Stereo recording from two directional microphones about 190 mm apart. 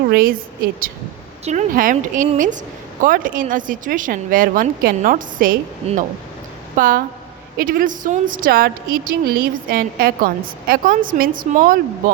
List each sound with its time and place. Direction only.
0.1 s a woman's voice: 50° right (ahead or behind)
6.7 s a woman's voice: 45° right (ahead or behind)